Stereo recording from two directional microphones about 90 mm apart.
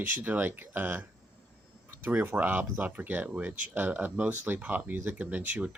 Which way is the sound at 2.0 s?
20° right (ahead or behind).